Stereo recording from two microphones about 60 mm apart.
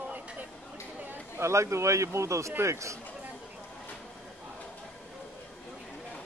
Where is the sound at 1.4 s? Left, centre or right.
Right.